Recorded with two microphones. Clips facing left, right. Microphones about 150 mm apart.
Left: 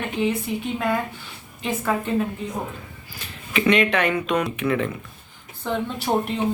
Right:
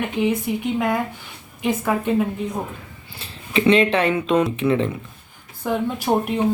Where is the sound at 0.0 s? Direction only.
15° right (ahead or behind).